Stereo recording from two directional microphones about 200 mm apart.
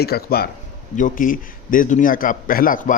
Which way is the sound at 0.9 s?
40° left (ahead or behind).